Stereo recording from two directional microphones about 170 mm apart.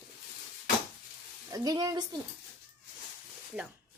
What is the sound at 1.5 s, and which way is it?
Speech, 20° right (ahead or behind).